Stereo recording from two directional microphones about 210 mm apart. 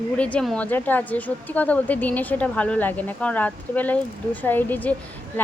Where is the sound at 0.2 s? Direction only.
5° left (ahead or behind).